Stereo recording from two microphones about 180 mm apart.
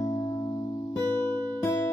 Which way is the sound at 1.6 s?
15° left (ahead or behind).